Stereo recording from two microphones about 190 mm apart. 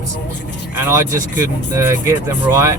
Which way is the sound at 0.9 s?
15° right (ahead or behind).